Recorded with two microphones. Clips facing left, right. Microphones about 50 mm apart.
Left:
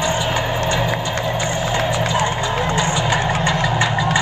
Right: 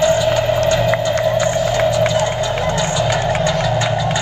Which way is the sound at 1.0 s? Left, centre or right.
Left.